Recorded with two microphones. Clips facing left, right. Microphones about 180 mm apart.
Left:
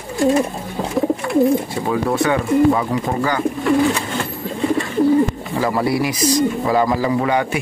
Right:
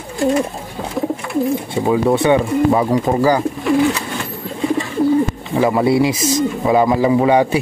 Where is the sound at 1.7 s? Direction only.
15° right (ahead or behind).